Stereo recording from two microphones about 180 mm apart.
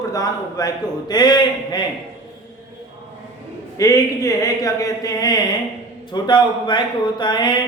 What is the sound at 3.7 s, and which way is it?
A man's voice, 20° left (ahead or behind).